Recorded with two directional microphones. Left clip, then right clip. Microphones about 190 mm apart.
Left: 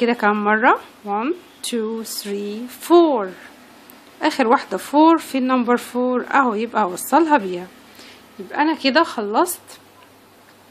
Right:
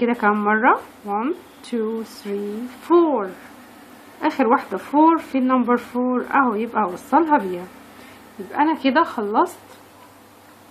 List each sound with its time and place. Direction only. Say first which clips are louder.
0.0 s speech: left 1 dB; 45° left (ahead or behind)
8.5 s a woman's voice: even; 40° left (ahead or behind)